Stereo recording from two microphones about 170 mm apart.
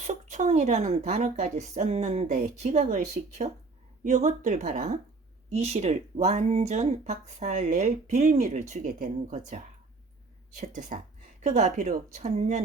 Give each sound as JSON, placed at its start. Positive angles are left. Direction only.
{"t": 0.0, "sound": "speech", "side_deg": -45}
{"t": 10.8, "sound": "speech", "side_deg": -45}